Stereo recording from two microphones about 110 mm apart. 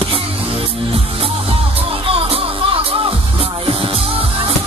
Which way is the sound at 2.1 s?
60° right (ahead or behind).